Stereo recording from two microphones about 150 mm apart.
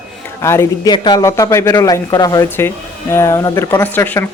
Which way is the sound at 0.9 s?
30° left (ahead or behind).